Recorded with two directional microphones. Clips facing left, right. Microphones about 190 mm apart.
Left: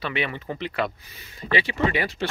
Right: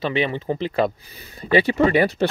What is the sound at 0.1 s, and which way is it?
Speech, 30° right (ahead or behind).